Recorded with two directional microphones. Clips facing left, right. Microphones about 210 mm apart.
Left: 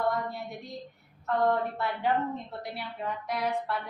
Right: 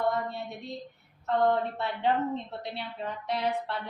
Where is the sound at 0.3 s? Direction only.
25° right (ahead or behind).